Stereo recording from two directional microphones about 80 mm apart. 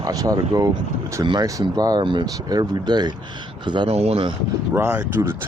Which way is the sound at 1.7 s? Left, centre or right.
Right.